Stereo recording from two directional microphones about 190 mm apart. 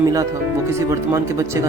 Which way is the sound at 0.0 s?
15° right (ahead or behind).